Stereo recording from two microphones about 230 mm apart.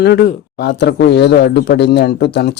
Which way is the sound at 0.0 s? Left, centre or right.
Left.